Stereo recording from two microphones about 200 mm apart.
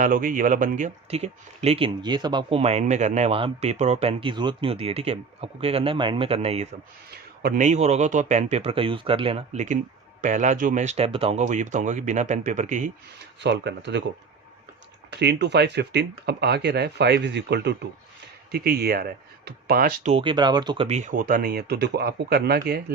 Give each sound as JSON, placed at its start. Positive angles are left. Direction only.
{"t": 0.0, "sound": "speech", "side_deg": -45}
{"t": 13.4, "sound": "speech", "side_deg": -60}
{"t": 15.2, "sound": "speech", "side_deg": -60}
{"t": 20.1, "sound": "speech", "side_deg": -25}
{"t": 20.8, "sound": "speech", "side_deg": -35}